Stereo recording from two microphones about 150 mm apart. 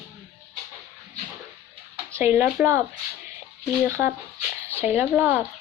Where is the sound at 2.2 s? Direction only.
10° right (ahead or behind).